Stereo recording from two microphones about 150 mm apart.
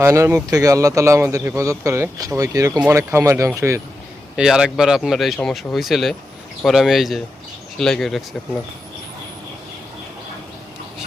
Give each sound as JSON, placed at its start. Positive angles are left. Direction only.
{"t": 0.0, "sound": "speech", "side_deg": -20}
{"t": 4.4, "sound": "speech", "side_deg": -5}